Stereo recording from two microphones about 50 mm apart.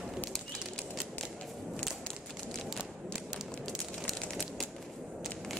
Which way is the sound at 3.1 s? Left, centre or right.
Centre.